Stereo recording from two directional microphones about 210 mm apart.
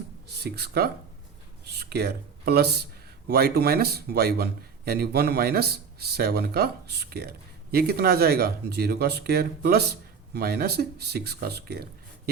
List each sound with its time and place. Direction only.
0.3 s speech: 50° right (ahead or behind)